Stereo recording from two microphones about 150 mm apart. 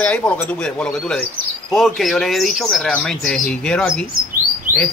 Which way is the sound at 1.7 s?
Centre (ahead or behind).